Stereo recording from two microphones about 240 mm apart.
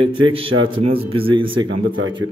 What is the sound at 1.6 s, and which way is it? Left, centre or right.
Speech, right.